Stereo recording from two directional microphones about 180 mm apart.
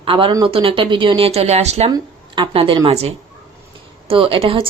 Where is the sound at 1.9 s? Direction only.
25° right (ahead or behind).